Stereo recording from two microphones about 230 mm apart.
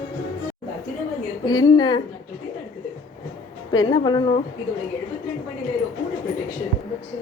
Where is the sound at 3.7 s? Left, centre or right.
Centre.